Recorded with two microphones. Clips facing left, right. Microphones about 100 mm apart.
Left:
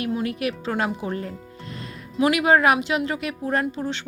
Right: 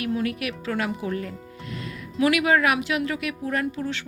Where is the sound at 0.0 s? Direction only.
25° left (ahead or behind).